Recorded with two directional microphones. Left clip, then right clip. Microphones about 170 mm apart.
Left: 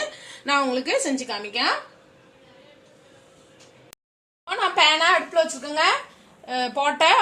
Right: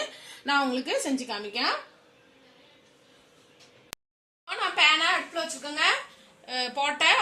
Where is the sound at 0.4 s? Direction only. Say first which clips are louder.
Left 4 dB; 35° right (ahead or behind).